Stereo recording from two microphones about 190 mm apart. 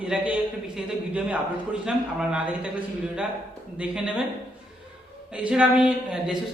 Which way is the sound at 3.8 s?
5° right (ahead or behind).